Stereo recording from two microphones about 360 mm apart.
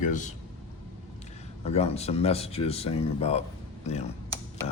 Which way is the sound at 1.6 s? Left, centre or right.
Centre.